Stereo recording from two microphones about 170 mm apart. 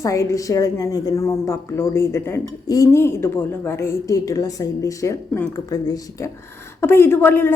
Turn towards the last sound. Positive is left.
turn(degrees=15)  # may be behind; listen again after turning